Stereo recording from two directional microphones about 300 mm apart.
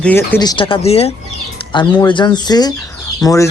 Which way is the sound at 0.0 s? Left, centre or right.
Centre.